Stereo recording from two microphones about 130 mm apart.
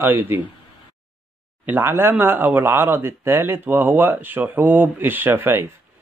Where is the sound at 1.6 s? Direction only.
15° right (ahead or behind).